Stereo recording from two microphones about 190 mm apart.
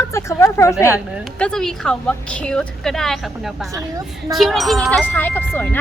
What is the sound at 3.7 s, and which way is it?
Speech, 20° right (ahead or behind).